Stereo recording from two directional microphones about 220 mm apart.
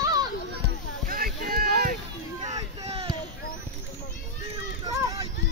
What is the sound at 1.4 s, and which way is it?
Run, 45° right (ahead or behind).